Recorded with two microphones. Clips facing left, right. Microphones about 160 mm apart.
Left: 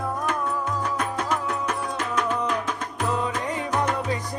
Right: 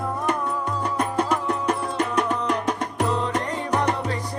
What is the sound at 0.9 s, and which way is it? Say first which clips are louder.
Music: right 3 dB; 35° right (ahead or behind).